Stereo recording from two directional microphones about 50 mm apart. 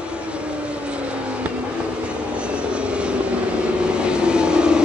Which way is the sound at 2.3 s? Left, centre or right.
Right.